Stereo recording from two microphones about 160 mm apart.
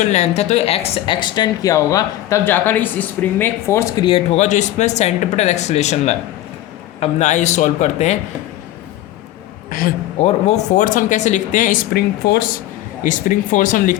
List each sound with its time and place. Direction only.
0.0 s speech: 45° left (ahead or behind); by 4.0 s 15° left (ahead or behind)
4.0 s speech: 35° left (ahead or behind)
9.6 s a man's voice: 65° left (ahead or behind)
10.2 s speech: 45° left (ahead or behind); by 12.5 s 75° left (ahead or behind)
13.0 s speech: 55° left (ahead or behind)